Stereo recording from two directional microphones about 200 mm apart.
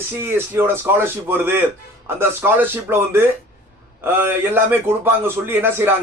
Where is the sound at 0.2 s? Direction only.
10° right (ahead or behind).